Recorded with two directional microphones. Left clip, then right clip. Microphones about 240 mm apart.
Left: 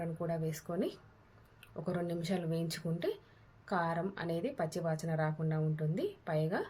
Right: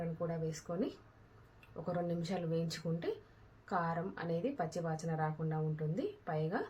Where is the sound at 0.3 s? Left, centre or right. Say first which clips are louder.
Left 2 dB; left.